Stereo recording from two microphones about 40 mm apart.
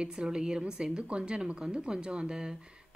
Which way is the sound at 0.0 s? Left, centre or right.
Right.